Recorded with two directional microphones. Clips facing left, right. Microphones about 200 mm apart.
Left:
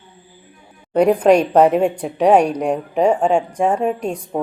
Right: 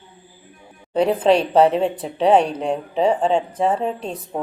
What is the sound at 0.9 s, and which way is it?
Speech, 10° left (ahead or behind).